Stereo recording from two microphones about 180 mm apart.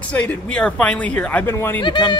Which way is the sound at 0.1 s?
5° left (ahead or behind).